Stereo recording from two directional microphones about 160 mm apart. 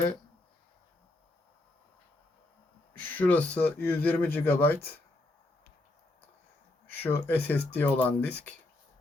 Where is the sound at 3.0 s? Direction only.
10° left (ahead or behind).